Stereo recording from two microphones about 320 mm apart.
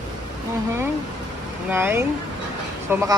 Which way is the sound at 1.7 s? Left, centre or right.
Centre.